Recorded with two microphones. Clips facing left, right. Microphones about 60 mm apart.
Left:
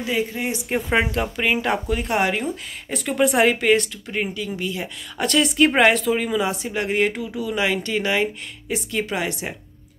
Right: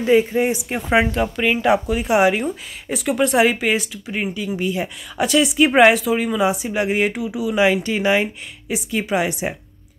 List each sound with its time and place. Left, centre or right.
0.0 s speech: right
0.7 s speech: centre
5.1 s speech: centre